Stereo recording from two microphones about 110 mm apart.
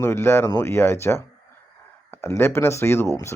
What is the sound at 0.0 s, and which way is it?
Speech, 20° left (ahead or behind).